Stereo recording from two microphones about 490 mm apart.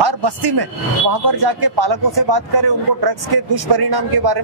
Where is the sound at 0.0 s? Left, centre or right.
Right.